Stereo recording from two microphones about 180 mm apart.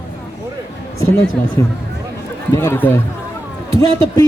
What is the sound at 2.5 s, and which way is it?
Speech, 15° left (ahead or behind).